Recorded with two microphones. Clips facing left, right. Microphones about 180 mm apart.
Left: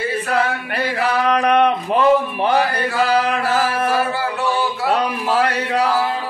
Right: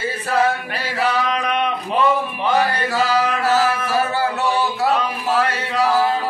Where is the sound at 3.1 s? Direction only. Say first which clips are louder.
Right 1 dB; 60° left (ahead or behind).